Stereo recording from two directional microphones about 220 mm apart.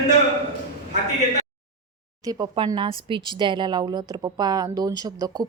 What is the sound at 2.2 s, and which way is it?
Speech, 15° right (ahead or behind).